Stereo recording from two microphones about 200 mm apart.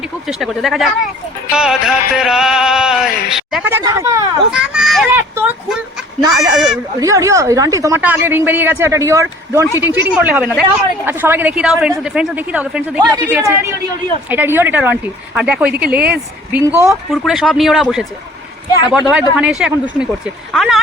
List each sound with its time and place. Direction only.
0.3 s speech: centre (ahead or behind)
3.8 s speech: 15° right (ahead or behind)
4.5 s speech: 5° right (ahead or behind)